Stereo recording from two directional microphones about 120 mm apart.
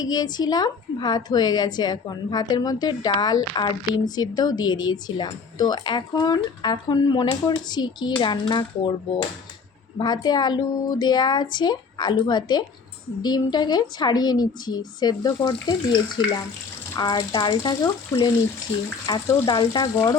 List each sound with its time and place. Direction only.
0.0 s a woman's voice: 35° left (ahead or behind)
19.3 s a woman's voice: 35° left (ahead or behind)